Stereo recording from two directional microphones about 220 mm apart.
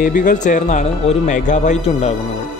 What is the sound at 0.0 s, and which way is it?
Speech, 35° left (ahead or behind).